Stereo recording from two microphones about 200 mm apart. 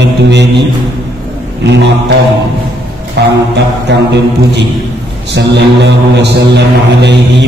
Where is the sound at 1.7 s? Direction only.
60° right (ahead or behind).